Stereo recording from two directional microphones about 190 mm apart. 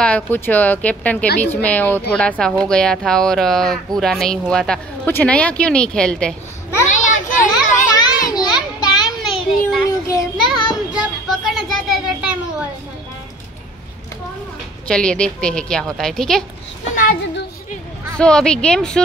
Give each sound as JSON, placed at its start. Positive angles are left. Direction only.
{"t": 0.0, "sound": "a woman's voice", "side_deg": 5}
{"t": 6.9, "sound": "children playing", "side_deg": 45}
{"t": 7.9, "sound": "children playing", "side_deg": 20}
{"t": 9.0, "sound": "a sound", "side_deg": 0}
{"t": 9.8, "sound": "child singing", "side_deg": 15}
{"t": 10.7, "sound": "a sound", "side_deg": 0}
{"t": 14.9, "sound": "a woman's voice", "side_deg": 5}
{"t": 16.9, "sound": "child singing", "side_deg": 45}
{"t": 18.1, "sound": "a woman's voice", "side_deg": 5}